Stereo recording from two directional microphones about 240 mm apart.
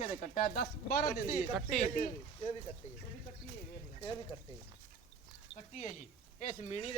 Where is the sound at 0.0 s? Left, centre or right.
Left.